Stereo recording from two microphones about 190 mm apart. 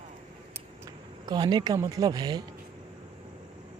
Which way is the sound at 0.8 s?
20° right (ahead or behind).